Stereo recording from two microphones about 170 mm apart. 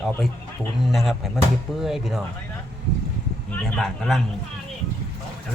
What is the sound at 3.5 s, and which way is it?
Speech, 5° left (ahead or behind).